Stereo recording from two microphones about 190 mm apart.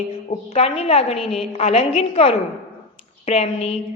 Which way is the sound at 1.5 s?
35° left (ahead or behind).